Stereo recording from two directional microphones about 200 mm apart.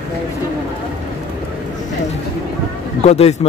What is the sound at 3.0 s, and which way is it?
Speech, 30° left (ahead or behind).